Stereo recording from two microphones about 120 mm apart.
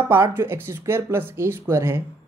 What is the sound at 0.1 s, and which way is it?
A woman's voice, 20° right (ahead or behind).